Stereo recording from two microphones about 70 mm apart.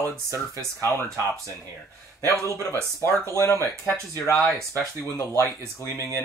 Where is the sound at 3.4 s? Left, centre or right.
Left.